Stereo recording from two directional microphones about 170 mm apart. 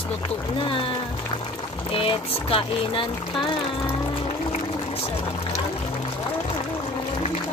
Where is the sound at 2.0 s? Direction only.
30° left (ahead or behind).